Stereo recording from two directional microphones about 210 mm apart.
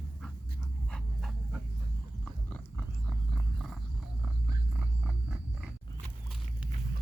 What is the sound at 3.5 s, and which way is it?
Wild animals, centre (ahead or behind).